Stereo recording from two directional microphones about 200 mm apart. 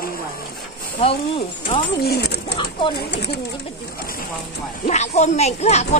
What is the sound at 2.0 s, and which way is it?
Speech, 55° left (ahead or behind).